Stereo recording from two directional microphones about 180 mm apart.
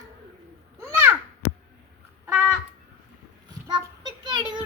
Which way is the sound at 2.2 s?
5° right (ahead or behind).